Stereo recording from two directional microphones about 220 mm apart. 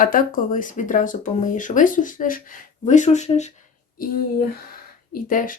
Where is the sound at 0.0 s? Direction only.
40° left (ahead or behind).